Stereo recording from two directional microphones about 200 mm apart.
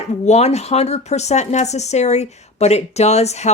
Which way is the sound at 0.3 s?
35° left (ahead or behind).